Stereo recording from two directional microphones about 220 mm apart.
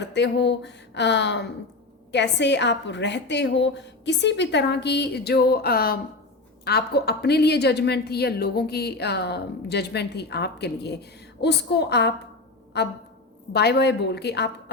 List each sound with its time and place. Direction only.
0.1 s a woman's voice: 50° left (ahead or behind)